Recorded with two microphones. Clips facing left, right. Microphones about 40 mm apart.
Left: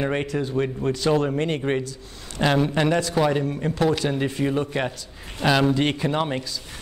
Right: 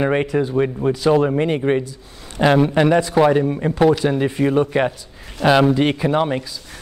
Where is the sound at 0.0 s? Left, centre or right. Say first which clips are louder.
Right 6 dB; centre.